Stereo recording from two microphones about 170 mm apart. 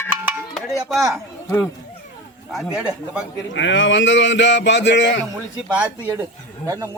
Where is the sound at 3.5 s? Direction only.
90° left.